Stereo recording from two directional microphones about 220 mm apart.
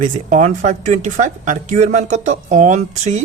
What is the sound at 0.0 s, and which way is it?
Speech, 35° right (ahead or behind).